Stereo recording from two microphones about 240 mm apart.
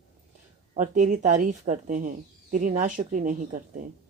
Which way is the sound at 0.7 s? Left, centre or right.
Right.